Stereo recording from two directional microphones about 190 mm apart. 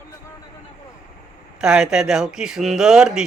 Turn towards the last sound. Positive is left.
turn(degrees=-5)  # may be behind; listen again after turning